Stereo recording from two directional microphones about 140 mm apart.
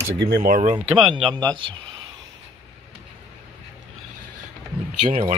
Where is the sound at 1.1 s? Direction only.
30° right (ahead or behind).